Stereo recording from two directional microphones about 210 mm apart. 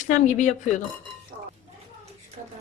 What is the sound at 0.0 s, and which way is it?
Speech, 35° left (ahead or behind).